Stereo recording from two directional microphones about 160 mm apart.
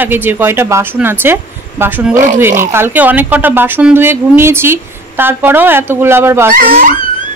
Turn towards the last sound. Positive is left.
turn(degrees=-65)  # may be behind; listen again after turning